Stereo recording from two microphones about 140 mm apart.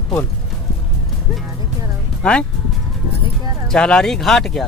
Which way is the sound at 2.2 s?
5° left (ahead or behind).